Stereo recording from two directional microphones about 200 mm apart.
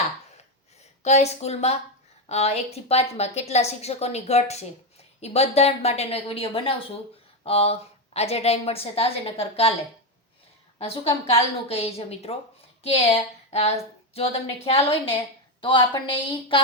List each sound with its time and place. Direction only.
1.0 s a woman's voice: 35° left (ahead or behind)
10.8 s a woman's voice: 30° left (ahead or behind)